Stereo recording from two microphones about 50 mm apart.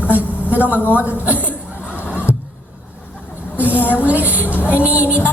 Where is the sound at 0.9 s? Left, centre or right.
Right.